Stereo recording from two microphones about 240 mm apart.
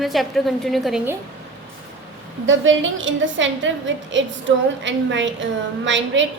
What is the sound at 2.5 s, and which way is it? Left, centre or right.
A woman's voice, right.